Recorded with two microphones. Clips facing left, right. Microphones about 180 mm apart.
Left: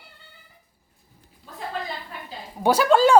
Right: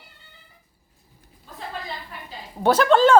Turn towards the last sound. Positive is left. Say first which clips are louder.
# right 1 dB
turn(degrees=10)  # may be behind; listen again after turning